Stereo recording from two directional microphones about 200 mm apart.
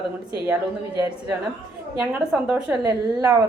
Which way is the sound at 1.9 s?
5° right (ahead or behind).